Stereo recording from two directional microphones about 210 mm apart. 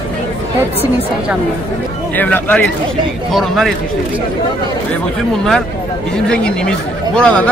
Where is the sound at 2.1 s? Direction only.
10° left (ahead or behind).